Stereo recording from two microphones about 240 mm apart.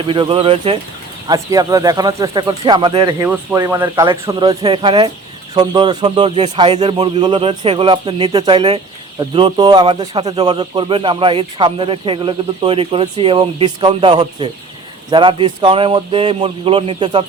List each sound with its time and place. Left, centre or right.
0.0 s speech: right